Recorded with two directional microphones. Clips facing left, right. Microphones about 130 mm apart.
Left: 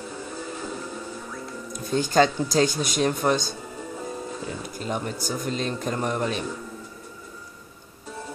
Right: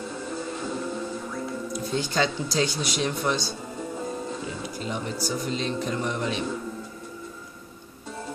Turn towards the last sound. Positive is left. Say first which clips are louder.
# left 2 dB
turn(degrees=45)  # may be behind; listen again after turning